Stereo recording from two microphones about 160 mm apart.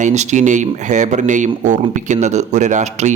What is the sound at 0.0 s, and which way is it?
A man's voice, 45° right (ahead or behind).